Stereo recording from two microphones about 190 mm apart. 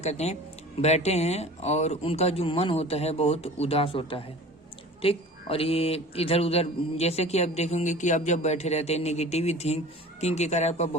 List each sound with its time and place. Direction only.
0.0 s a man's voice: 35° left (ahead or behind)